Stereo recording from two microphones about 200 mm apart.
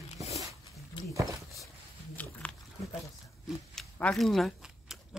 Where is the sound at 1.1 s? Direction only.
15° right (ahead or behind).